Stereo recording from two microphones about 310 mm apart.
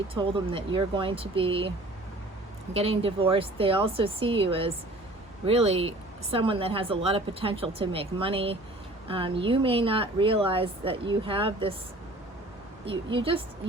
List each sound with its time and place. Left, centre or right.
0.1 s speech: centre
2.7 s speech: centre
12.8 s speech: centre